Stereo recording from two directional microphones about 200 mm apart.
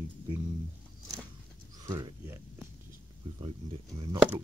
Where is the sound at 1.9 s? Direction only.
15° right (ahead or behind).